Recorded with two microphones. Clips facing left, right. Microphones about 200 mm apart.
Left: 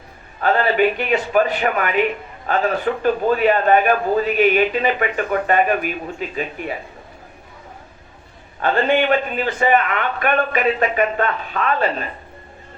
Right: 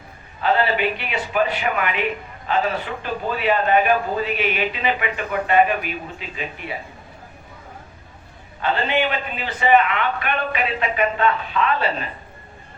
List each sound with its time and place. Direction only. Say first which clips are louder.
0.4 s a man's voice: left 3 dB; 45° left (ahead or behind)
8.6 s a man's voice: left 4 dB; 50° left (ahead or behind)